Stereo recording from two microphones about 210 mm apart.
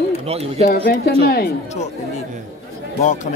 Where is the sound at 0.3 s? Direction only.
30° right (ahead or behind).